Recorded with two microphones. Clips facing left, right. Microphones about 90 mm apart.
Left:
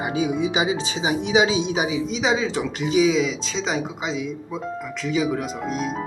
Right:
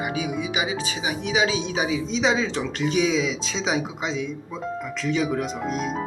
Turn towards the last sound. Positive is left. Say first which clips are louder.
# even
turn(degrees=0)  # may be behind; listen again after turning